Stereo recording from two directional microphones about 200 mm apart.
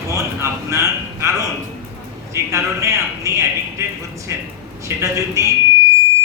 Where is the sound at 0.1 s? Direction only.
15° right (ahead or behind).